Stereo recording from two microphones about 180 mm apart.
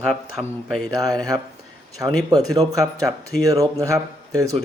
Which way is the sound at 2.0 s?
10° right (ahead or behind).